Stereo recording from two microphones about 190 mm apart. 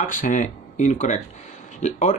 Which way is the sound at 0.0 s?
45° left (ahead or behind).